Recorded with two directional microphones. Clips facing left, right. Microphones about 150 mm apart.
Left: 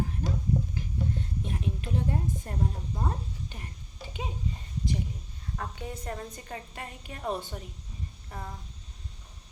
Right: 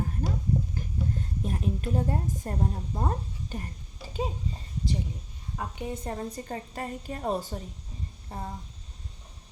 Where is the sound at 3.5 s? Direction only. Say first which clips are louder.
Right 7 dB; 40° right (ahead or behind).